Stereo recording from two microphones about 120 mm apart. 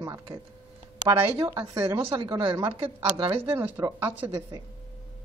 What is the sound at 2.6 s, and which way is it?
Speech, 50° right (ahead or behind).